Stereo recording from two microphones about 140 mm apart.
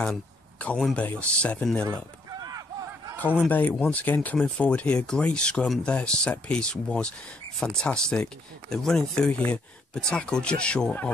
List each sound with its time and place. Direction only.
0.0 s speech: 10° left (ahead or behind)
2.3 s a sound: 30° right (ahead or behind)
3.3 s speech: 10° left (ahead or behind)